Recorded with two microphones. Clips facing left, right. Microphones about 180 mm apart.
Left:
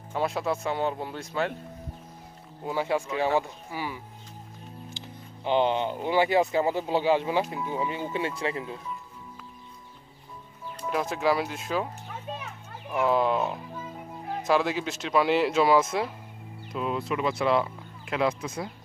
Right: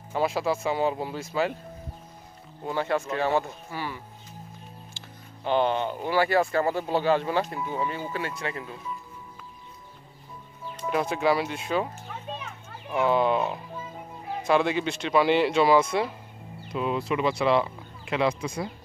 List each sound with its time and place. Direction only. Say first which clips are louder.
0.1 s speech: right 2 dB; 5° right (ahead or behind)
2.6 s speech: even; 10° left (ahead or behind)
4.9 s music: left 4 dB; 15° left (ahead or behind)
6.0 s speech: even; 20° left (ahead or behind)
10.9 s a child's voice: right 2 dB; centre (ahead or behind)